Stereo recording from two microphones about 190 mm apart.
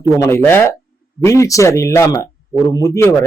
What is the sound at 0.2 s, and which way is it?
Speech, 15° left (ahead or behind).